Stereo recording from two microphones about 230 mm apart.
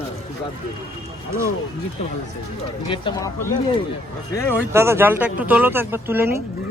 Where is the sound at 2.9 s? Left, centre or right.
Left.